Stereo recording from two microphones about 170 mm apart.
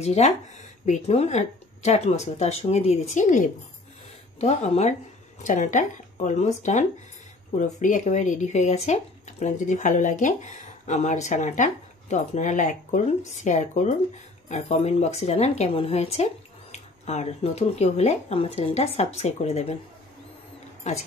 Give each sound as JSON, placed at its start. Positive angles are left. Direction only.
{"t": 0.0, "sound": "speech", "side_deg": 40}
{"t": 20.9, "sound": "speech", "side_deg": 45}